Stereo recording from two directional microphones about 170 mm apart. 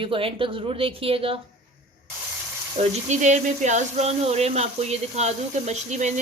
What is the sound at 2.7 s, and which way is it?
Speech, 40° right (ahead or behind).